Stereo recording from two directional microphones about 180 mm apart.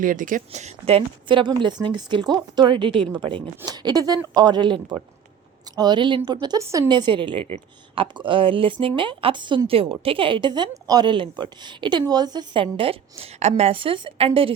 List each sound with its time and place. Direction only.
0.0 s a woman's voice: 50° right (ahead or behind); by 14.5 s 30° right (ahead or behind)